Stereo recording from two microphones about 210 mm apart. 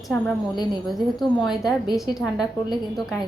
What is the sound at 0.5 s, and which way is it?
Speech, 20° left (ahead or behind).